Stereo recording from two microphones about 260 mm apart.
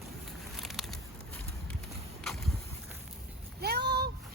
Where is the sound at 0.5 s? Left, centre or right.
Centre.